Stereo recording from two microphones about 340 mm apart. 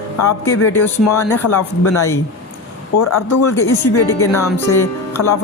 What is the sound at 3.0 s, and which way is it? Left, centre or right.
Speech, left.